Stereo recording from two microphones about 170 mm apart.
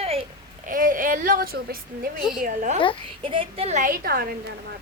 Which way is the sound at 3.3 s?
35° right (ahead or behind).